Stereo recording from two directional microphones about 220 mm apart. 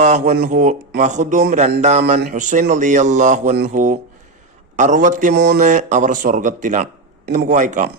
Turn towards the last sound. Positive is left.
turn(degrees=-35)  # may be behind; listen again after turning